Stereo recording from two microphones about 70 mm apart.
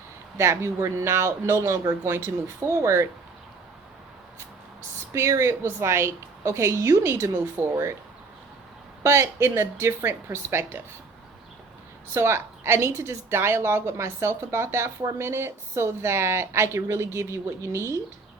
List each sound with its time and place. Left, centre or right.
0.3 s speech: right
5.1 s speech: right
9.0 s speech: right
12.1 s speech: right